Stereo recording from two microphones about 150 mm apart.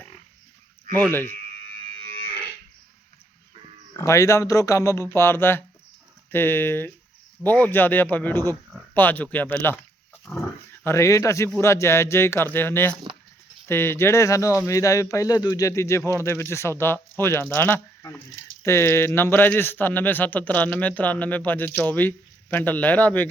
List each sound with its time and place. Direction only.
3.9 s a man's voice: 20° left (ahead or behind)